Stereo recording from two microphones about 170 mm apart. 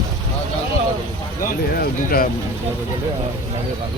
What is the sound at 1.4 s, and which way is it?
Speech, 55° left (ahead or behind).